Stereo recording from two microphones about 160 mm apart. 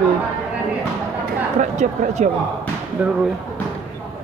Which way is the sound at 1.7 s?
50° right (ahead or behind).